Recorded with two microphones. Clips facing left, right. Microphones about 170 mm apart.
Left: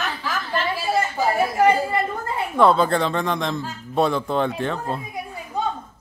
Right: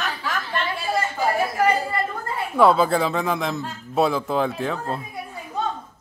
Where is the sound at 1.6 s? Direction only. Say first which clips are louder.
Left 4 dB; 25° left (ahead or behind).